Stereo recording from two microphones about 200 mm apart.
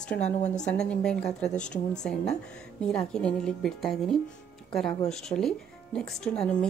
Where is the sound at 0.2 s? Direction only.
35° left (ahead or behind).